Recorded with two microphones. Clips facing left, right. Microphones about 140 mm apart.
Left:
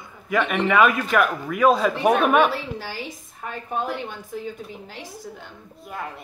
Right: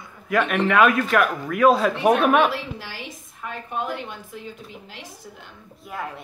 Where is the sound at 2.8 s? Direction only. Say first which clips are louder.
Left 4 dB; 40° left (ahead or behind).